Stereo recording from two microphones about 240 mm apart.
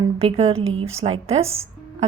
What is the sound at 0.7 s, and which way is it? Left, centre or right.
Speech, right.